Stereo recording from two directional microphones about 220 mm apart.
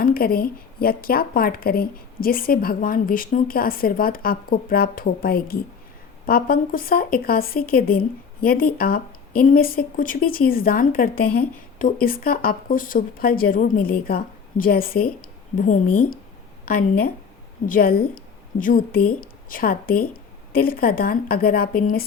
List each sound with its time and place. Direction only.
0.0 s a woman's voice: 40° left (ahead or behind)